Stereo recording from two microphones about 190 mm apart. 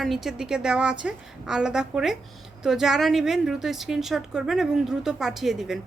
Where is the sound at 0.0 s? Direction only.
Centre (ahead or behind).